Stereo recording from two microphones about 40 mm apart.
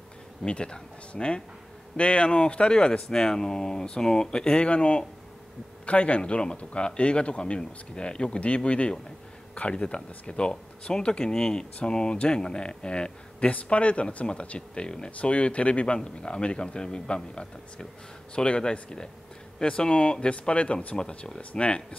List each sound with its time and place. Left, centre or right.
0.5 s speech: left